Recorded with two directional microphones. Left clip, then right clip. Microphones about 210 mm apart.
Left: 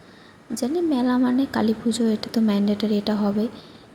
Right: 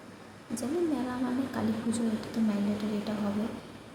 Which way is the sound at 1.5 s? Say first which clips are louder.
Left 9 dB; 35° left (ahead or behind).